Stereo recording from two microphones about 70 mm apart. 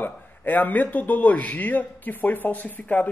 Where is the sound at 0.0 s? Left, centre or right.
Left.